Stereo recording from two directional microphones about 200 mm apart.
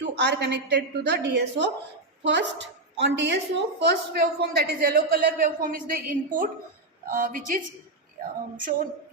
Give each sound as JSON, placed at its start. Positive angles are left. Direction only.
{"t": 0.0, "sound": "a woman's voice", "side_deg": -60}